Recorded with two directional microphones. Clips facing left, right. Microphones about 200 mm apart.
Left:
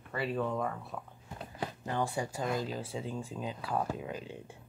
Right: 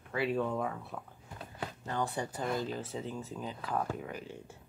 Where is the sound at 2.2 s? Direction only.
10° left (ahead or behind).